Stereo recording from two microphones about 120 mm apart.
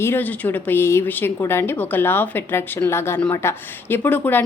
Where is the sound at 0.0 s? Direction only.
20° left (ahead or behind).